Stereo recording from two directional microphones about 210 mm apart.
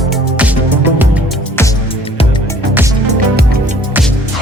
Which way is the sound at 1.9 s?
25° left (ahead or behind).